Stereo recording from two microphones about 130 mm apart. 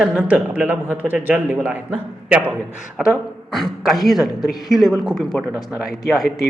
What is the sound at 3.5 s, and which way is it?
A man's voice, centre (ahead or behind).